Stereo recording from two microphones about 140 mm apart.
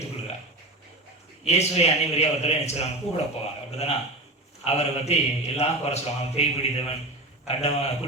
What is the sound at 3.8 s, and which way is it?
A man's voice, 50° left (ahead or behind).